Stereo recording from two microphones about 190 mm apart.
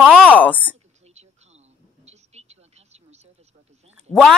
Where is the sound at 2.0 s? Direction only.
35° right (ahead or behind).